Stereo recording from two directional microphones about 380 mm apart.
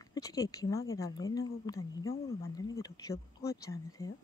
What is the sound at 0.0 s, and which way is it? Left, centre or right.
Speech, centre.